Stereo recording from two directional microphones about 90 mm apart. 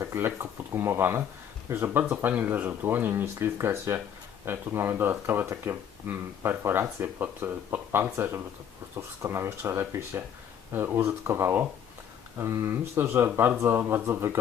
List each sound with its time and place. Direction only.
0.0 s speech: 30° right (ahead or behind)